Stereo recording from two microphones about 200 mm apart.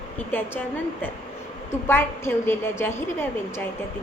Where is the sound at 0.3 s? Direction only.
10° left (ahead or behind).